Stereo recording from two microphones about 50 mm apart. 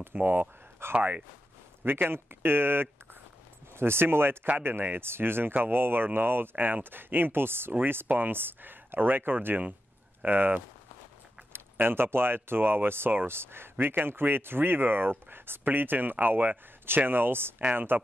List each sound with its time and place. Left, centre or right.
0.1 s speech: right
1.9 s speech: right
11.5 s speech: right
16.8 s speech: right